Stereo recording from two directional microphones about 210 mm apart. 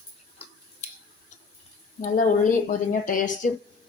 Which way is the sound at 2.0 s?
40° left (ahead or behind).